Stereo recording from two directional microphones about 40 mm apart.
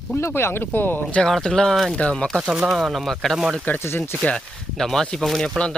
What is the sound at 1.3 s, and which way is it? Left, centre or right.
Speech, centre.